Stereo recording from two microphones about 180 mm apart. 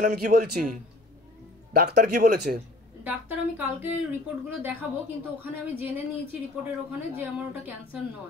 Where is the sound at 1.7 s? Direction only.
60° right (ahead or behind).